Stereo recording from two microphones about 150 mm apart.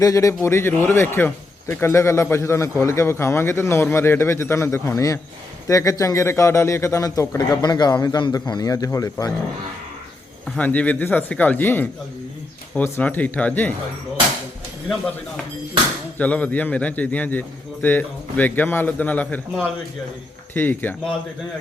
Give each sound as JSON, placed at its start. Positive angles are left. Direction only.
{"t": 0.0, "sound": "a man's voice", "side_deg": 20}
{"t": 10.5, "sound": "a man's voice", "side_deg": 10}
{"t": 16.1, "sound": "a man's voice", "side_deg": 10}
{"t": 20.5, "sound": "a man's voice", "side_deg": 15}